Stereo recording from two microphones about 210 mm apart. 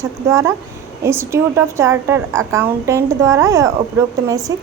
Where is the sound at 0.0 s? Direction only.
15° right (ahead or behind).